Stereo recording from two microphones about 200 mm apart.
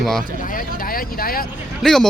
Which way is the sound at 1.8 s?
Centre (ahead or behind).